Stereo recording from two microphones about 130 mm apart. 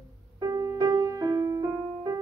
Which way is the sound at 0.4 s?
25° right (ahead or behind).